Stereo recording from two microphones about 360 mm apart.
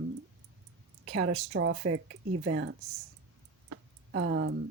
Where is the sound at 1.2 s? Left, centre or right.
Right.